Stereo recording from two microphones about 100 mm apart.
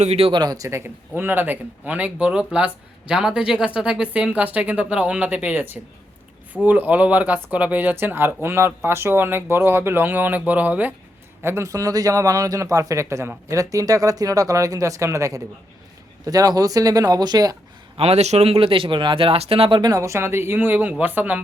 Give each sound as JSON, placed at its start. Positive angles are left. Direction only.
{"t": 0.1, "sound": "speech", "side_deg": -75}
{"t": 0.3, "sound": "speech", "side_deg": -40}
{"t": 11.4, "sound": "speech", "side_deg": -30}
{"t": 17.9, "sound": "speech", "side_deg": -90}
{"t": 19.8, "sound": "speech", "side_deg": -35}